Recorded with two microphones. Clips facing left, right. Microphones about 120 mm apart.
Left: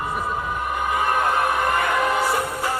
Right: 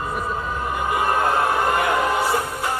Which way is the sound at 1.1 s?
30° right (ahead or behind).